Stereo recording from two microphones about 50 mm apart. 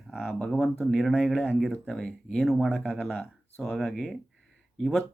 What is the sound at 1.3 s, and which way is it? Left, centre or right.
Speech, left.